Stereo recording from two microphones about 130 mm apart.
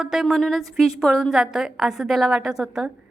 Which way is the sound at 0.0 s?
5° right (ahead or behind).